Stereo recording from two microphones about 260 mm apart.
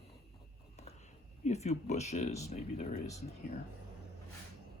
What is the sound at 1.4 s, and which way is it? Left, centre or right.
Speech, left.